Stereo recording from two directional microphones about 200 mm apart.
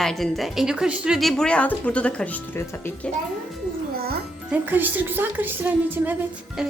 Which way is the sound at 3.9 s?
50° right (ahead or behind).